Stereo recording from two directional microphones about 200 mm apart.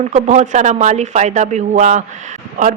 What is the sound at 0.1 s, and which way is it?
A woman's voice, 35° right (ahead or behind).